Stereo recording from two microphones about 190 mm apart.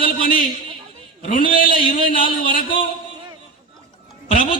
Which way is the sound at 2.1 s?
25° left (ahead or behind).